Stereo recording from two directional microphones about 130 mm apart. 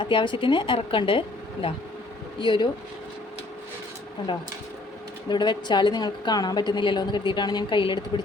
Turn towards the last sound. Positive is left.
turn(degrees=40)  # may be behind; listen again after turning